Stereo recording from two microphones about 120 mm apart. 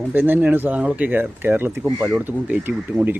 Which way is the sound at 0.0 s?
15° right (ahead or behind).